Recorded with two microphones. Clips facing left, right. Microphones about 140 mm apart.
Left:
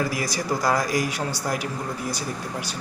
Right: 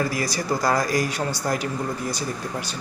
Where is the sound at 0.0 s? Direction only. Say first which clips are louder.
Right 1 dB; 15° left (ahead or behind).